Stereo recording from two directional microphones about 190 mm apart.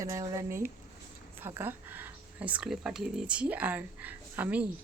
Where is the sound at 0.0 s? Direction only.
15° right (ahead or behind).